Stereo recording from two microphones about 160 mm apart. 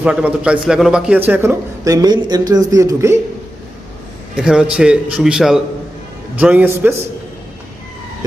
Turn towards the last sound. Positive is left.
turn(degrees=-10)  # may be behind; listen again after turning